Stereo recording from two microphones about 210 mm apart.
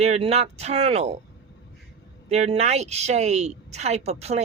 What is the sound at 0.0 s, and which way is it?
Speech, 30° right (ahead or behind).